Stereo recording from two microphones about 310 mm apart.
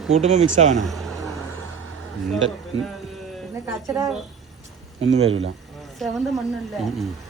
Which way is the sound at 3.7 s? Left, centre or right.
Centre.